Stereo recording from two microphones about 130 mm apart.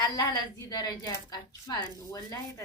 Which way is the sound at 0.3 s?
30° left (ahead or behind).